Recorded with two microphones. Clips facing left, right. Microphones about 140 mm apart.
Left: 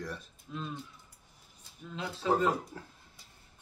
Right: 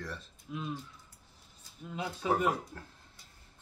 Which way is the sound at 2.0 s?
15° right (ahead or behind).